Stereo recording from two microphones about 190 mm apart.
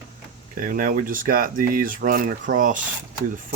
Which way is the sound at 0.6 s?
45° right (ahead or behind).